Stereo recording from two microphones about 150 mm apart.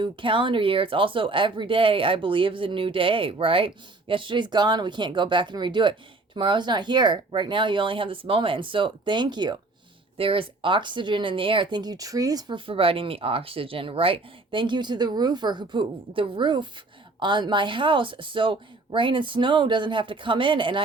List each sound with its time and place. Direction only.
0.0 s speech: 35° right (ahead or behind)